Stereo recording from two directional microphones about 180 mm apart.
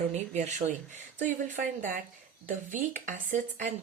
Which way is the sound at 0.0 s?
40° right (ahead or behind).